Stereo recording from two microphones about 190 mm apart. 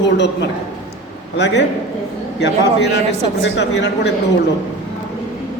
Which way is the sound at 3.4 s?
65° left (ahead or behind).